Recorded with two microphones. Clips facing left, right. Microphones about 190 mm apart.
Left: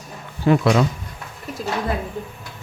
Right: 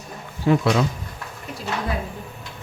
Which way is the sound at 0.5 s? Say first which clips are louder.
Left 2 dB; 65° left (ahead or behind).